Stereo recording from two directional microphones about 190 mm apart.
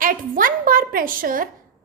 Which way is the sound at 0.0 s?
45° right (ahead or behind).